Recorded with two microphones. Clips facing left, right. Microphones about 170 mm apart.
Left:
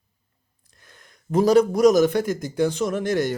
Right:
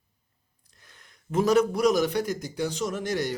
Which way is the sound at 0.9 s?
40° left (ahead or behind).